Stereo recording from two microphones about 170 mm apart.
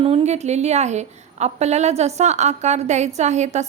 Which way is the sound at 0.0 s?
35° right (ahead or behind).